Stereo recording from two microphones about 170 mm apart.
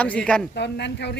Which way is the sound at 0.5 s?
85° left.